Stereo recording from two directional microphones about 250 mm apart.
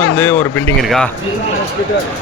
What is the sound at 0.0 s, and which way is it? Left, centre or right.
Speech, centre.